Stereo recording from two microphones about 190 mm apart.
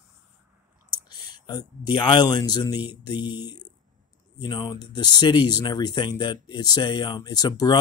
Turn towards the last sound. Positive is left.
turn(degrees=20)  # may be behind; listen again after turning